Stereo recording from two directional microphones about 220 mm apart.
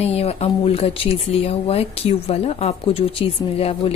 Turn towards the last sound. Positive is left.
turn(degrees=25)  # may be behind; listen again after turning